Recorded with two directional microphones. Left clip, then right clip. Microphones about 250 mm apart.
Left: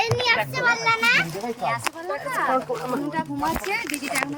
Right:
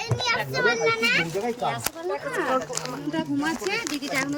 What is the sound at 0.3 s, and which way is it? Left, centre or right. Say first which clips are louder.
Speech: even; left.